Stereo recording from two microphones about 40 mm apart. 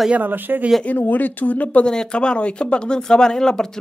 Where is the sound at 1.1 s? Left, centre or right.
Left.